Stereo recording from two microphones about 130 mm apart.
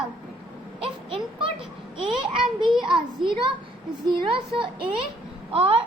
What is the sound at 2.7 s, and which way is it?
Speech, centre (ahead or behind).